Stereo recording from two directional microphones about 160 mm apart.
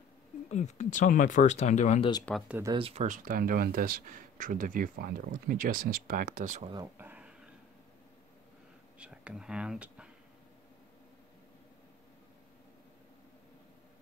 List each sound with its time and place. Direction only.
0.5 s speech: 45° left (ahead or behind)
2.3 s speech: 10° left (ahead or behind)
2.8 s speech: 45° right (ahead or behind)
6.6 s speech: 30° right (ahead or behind)
7.0 s a sound: 10° right (ahead or behind)
8.9 s speech: 5° right (ahead or behind)